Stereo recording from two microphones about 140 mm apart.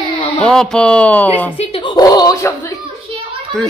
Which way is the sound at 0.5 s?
5° left (ahead or behind).